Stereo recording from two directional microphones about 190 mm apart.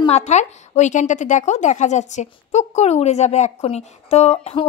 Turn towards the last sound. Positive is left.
turn(degrees=35)  # may be behind; listen again after turning